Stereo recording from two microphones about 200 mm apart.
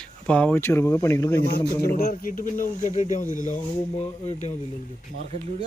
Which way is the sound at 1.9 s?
40° left (ahead or behind).